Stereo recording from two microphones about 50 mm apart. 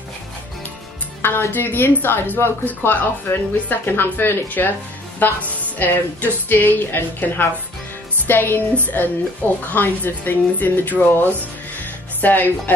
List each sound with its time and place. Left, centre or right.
1.2 s a woman's voice: left